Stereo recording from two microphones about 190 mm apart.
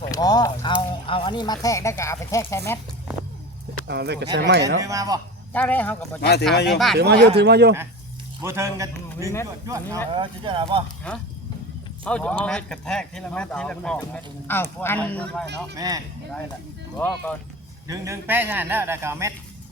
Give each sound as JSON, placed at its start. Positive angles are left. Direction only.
{"t": 0.1, "sound": "speech", "side_deg": 20}
{"t": 3.8, "sound": "speech", "side_deg": -60}
{"t": 4.9, "sound": "a man's voice", "side_deg": -20}
{"t": 5.5, "sound": "speech", "side_deg": 10}
{"t": 6.5, "sound": "speech", "side_deg": 60}
{"t": 6.9, "sound": "speech", "side_deg": -60}
{"t": 8.4, "sound": "a man's voice", "side_deg": -15}
{"t": 10.1, "sound": "speech", "side_deg": -25}
{"t": 11.1, "sound": "speech", "side_deg": 5}
{"t": 15.7, "sound": "speech", "side_deg": -20}
{"t": 17.0, "sound": "speech", "side_deg": 5}
{"t": 17.8, "sound": "a man's voice", "side_deg": -15}